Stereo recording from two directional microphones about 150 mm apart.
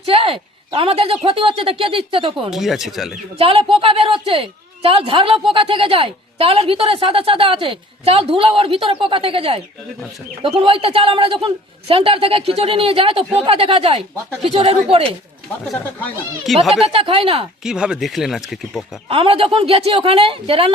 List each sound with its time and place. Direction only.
0.0 s a woman's voice: 35° right (ahead or behind)
2.5 s speech: centre (ahead or behind)
3.3 s a woman's voice: 35° right (ahead or behind)
16.5 s speech: centre (ahead or behind)
16.8 s a woman's voice: 40° right (ahead or behind)
17.6 s speech: 5° right (ahead or behind)
19.0 s a woman's voice: 40° right (ahead or behind)